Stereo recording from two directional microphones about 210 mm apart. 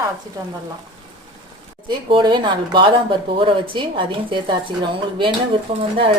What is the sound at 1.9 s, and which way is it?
A woman's voice, 20° right (ahead or behind).